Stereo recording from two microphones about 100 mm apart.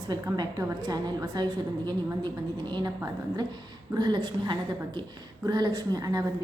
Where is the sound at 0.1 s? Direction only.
45° right (ahead or behind).